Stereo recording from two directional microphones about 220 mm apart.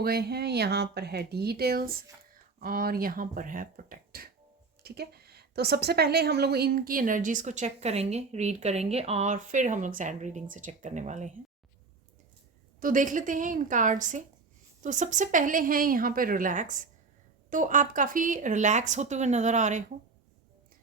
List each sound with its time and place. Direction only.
0.0 s a woman's voice: 45° right (ahead or behind)
12.8 s a woman's voice: 35° right (ahead or behind)